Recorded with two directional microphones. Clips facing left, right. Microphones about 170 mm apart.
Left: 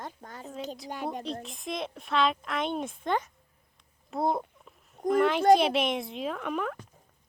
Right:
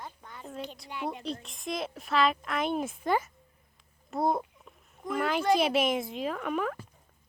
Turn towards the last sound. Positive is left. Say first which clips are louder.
# right 1 dB
turn(degrees=0)  # may be behind; listen again after turning